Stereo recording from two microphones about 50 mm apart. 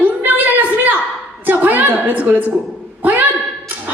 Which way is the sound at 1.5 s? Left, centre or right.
Right.